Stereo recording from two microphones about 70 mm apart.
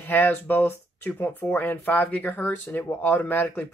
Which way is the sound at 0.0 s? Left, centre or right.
Left.